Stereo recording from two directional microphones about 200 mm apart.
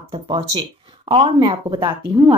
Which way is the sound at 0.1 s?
25° right (ahead or behind).